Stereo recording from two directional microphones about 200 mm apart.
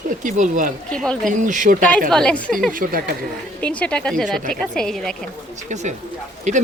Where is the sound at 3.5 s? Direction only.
5° left (ahead or behind).